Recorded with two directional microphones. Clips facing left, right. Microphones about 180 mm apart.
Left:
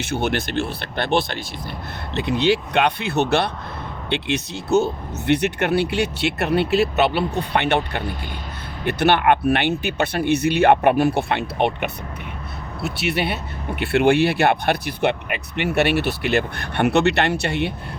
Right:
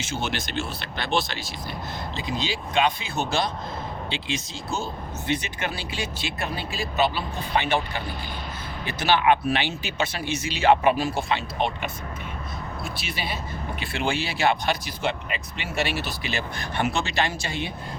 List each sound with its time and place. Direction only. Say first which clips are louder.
0.0 s speech: left 7 dB; 60° left (ahead or behind)
8.8 s speech: left 5 dB; 60° left (ahead or behind)